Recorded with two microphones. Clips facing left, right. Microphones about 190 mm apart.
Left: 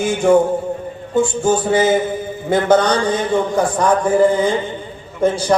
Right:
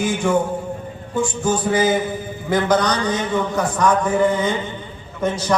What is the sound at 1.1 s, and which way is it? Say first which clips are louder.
A man's voice: left 5 dB; 25° left (ahead or behind).